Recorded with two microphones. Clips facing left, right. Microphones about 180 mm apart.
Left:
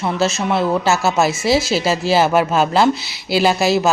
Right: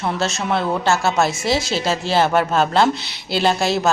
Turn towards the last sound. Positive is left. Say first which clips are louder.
# left 3 dB
turn(degrees=5)  # may be behind; listen again after turning